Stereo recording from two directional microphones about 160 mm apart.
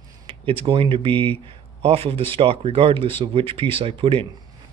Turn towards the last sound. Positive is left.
turn(degrees=-35)  # may be behind; listen again after turning